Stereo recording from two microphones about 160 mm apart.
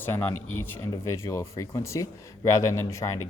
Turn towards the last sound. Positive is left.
turn(degrees=20)  # may be behind; listen again after turning